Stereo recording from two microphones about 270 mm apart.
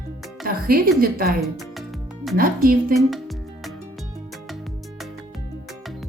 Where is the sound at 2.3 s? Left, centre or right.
Right.